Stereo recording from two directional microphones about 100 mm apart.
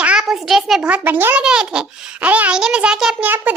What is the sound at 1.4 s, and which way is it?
Babbling, 5° right (ahead or behind).